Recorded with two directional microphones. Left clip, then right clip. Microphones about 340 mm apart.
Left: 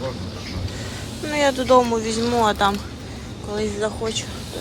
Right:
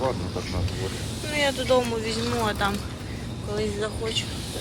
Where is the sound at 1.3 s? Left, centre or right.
Centre.